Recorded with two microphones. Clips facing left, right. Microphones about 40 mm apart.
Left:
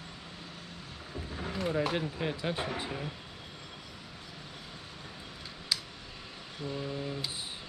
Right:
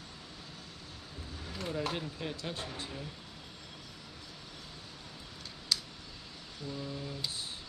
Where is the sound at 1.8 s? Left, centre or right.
Left.